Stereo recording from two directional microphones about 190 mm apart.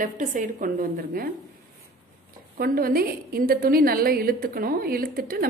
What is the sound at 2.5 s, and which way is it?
A woman's voice, 50° right (ahead or behind).